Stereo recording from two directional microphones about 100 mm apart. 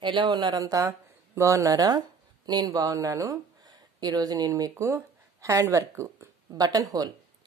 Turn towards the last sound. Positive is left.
turn(degrees=-40)  # may be behind; listen again after turning